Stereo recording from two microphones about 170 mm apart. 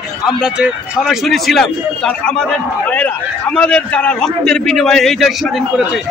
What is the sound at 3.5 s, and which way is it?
A man's voice, 5° left (ahead or behind).